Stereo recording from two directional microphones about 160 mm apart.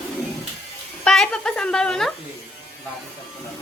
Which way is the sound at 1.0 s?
5° left (ahead or behind).